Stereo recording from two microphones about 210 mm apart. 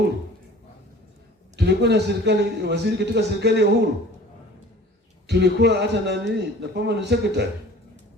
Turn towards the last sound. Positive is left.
turn(degrees=-55)  # may be behind; listen again after turning